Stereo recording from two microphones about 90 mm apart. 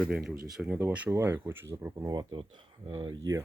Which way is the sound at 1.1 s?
25° right (ahead or behind).